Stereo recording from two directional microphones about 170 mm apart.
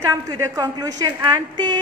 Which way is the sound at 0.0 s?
20° right (ahead or behind).